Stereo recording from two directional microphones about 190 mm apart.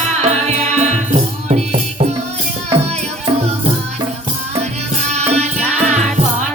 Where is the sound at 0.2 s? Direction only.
35° right (ahead or behind).